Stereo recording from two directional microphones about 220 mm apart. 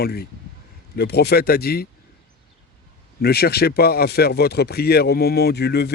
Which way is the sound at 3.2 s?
45° left (ahead or behind).